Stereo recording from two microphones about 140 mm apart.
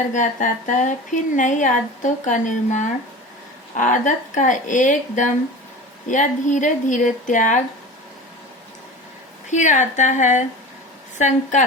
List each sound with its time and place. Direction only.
0.1 s a woman's voice: 65° left (ahead or behind)
9.5 s a woman's voice: 60° left (ahead or behind)